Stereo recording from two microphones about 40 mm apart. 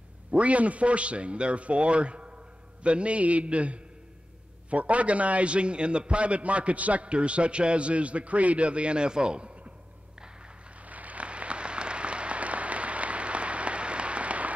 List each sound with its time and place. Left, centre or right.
0.3 s a man's voice: right
10.8 s applause: right